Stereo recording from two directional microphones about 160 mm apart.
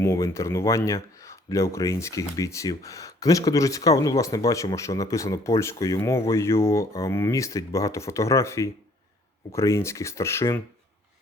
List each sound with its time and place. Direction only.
0.0 s speech: 20° left (ahead or behind)